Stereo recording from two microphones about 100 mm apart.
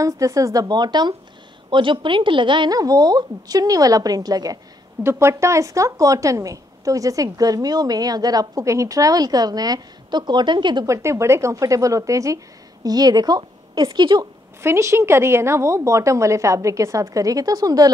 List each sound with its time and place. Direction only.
0.0 s a woman's voice: 35° right (ahead or behind); by 2.7 s 55° right (ahead or behind)
2.7 s a woman's voice: 40° right (ahead or behind)
5.0 s a woman's voice: 30° right (ahead or behind); by 10.9 s 50° right (ahead or behind)
10.9 s a woman's voice: 30° right (ahead or behind); by 14.2 s 50° right (ahead or behind)
14.6 s a woman's voice: 25° right (ahead or behind)